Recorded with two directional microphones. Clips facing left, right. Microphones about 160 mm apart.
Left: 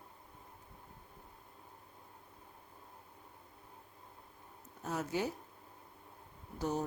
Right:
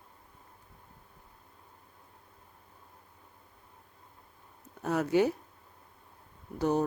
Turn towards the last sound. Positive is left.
turn(degrees=-65)  # may be behind; listen again after turning